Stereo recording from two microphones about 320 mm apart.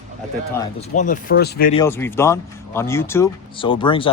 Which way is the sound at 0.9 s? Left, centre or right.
Left.